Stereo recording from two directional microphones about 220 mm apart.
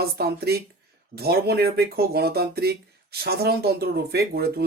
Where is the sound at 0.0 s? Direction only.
45° right (ahead or behind).